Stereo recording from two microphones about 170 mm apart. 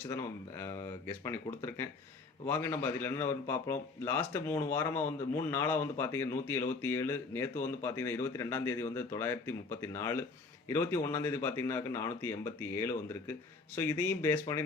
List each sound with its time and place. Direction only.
0.1 s a man's voice: 15° left (ahead or behind)